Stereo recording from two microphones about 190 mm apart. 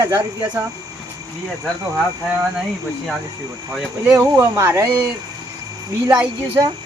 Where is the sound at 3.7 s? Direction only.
5° right (ahead or behind).